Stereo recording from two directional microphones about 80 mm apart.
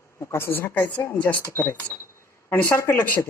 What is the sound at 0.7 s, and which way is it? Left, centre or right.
A woman's voice, centre.